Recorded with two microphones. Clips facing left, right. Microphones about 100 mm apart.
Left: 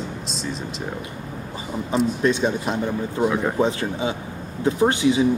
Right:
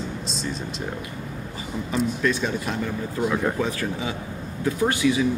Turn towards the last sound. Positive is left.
turn(degrees=25)  # may be behind; listen again after turning